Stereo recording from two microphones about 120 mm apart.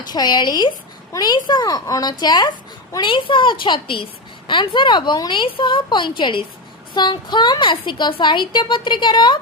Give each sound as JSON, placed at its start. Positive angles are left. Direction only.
{"t": 0.1, "sound": "a woman's voice", "side_deg": 35}